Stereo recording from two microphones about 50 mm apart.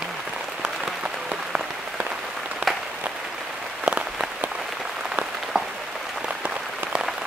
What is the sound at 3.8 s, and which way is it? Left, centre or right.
Applause, right.